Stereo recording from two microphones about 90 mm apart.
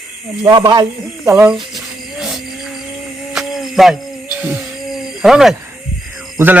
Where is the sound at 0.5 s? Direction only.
60° right (ahead or behind).